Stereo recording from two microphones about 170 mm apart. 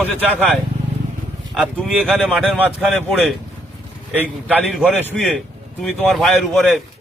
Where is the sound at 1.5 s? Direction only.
Centre (ahead or behind).